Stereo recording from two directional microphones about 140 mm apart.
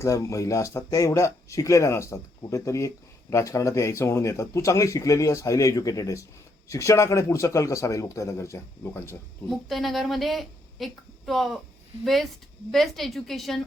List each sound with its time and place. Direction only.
0.0 s speech: 20° left (ahead or behind)
9.5 s speech: centre (ahead or behind)